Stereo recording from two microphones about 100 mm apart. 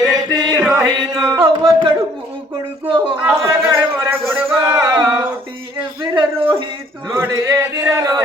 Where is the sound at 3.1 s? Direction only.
20° right (ahead or behind).